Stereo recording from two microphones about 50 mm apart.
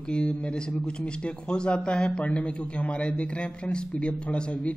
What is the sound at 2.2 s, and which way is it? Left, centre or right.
A man's voice, left.